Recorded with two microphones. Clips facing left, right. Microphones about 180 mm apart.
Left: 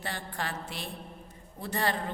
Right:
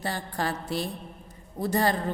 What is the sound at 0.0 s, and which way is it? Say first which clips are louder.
A woman's voice: right 6 dB; 40° right (ahead or behind).